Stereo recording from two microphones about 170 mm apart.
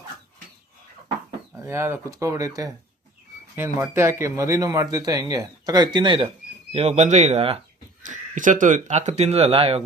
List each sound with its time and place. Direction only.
1.5 s speech: 15° right (ahead or behind); by 7.6 s 35° right (ahead or behind)
8.0 s speech: 50° right (ahead or behind)